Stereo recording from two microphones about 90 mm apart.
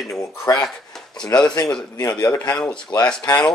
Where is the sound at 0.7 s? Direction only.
5° left (ahead or behind).